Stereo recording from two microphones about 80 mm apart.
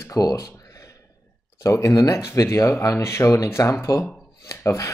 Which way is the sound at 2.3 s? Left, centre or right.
Left.